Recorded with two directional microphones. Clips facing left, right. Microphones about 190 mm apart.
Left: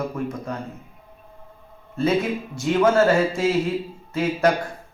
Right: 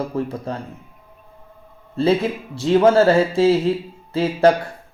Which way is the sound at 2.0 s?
30° right (ahead or behind).